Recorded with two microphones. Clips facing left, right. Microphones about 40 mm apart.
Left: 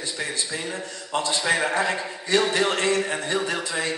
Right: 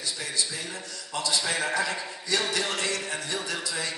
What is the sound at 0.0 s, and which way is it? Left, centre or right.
A man's voice, left.